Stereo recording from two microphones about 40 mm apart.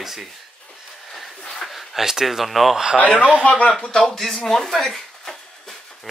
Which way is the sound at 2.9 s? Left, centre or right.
Left.